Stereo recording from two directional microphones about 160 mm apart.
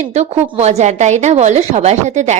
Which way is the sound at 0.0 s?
40° right (ahead or behind).